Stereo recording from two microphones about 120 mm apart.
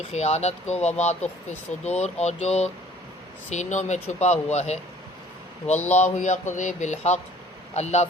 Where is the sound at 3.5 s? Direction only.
80° left.